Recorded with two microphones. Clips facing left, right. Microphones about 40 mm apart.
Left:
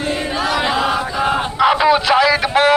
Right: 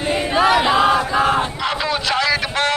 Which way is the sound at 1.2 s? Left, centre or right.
Centre.